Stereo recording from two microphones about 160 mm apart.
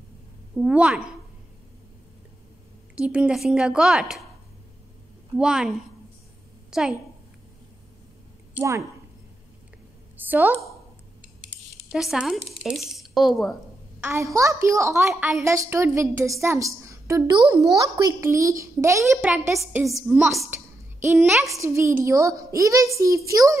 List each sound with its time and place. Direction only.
0.6 s a woman's voice: 5° right (ahead or behind)
3.0 s speech: 5° right (ahead or behind)
5.4 s a woman's voice: 5° right (ahead or behind)
8.5 s a woman's voice: 20° right (ahead or behind)
10.1 s a sound: 10° right (ahead or behind)
11.9 s speech: centre (ahead or behind)
14.0 s a woman's voice: 20° right (ahead or behind)
19.2 s a woman's voice: 5° right (ahead or behind)
20.4 s a sound: 15° right (ahead or behind)
21.5 s a woman's voice: 20° right (ahead or behind)